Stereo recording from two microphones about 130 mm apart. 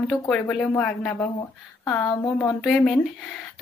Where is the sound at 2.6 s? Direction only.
Centre (ahead or behind).